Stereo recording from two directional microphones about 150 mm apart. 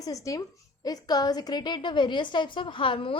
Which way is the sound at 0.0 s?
20° left (ahead or behind).